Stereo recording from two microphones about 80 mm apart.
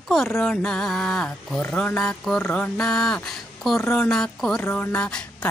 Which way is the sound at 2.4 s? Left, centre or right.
Left.